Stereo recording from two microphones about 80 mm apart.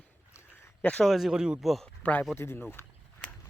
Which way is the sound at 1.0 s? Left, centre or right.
Centre.